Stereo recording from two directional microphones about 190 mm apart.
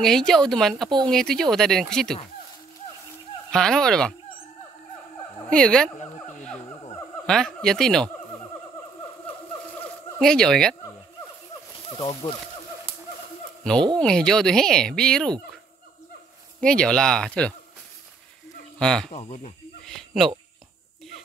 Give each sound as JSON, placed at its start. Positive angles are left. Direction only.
{"t": 0.0, "sound": "speech", "side_deg": 0}
{"t": 3.5, "sound": "speech", "side_deg": 5}
{"t": 5.5, "sound": "speech", "side_deg": 5}
{"t": 7.2, "sound": "speech", "side_deg": 5}
{"t": 10.1, "sound": "speech", "side_deg": 5}
{"t": 11.9, "sound": "speech", "side_deg": 25}
{"t": 13.9, "sound": "speech", "side_deg": 5}
{"t": 16.6, "sound": "speech", "side_deg": 5}
{"t": 18.8, "sound": "speech", "side_deg": 5}
{"t": 19.1, "sound": "speech", "side_deg": 30}
{"t": 20.0, "sound": "a sound", "side_deg": 0}